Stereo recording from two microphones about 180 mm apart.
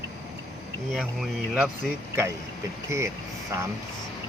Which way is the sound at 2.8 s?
15° right (ahead or behind).